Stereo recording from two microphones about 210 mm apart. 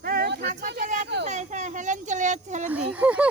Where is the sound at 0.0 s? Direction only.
45° right (ahead or behind).